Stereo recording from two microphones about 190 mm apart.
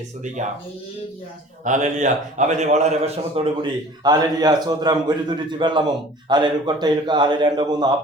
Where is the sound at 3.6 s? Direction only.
20° right (ahead or behind).